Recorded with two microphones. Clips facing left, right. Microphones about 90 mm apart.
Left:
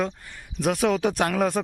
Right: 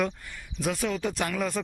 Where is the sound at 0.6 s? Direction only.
65° left (ahead or behind).